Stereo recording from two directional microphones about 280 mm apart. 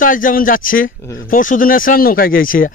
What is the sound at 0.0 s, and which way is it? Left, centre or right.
Speech, left.